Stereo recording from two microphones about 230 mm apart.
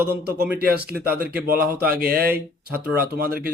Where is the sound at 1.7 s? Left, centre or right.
Right.